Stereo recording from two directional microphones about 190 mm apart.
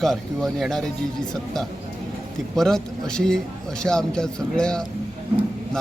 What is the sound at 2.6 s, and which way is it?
A man's voice, 5° left (ahead or behind).